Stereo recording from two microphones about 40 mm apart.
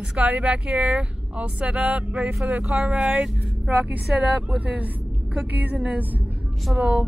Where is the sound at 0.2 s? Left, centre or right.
Right.